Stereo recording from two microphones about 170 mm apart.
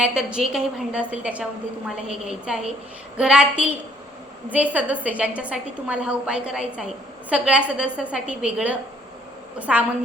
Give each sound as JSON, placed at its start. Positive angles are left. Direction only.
{"t": 0.0, "sound": "a woman's voice", "side_deg": -5}